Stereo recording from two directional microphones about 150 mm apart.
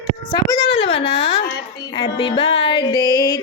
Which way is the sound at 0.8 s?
40° left (ahead or behind).